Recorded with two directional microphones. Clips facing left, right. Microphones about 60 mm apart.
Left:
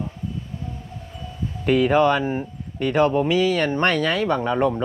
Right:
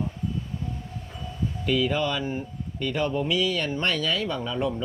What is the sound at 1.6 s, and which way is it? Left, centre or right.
Speech, left.